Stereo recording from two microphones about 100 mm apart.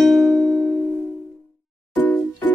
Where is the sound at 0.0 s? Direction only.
Centre (ahead or behind).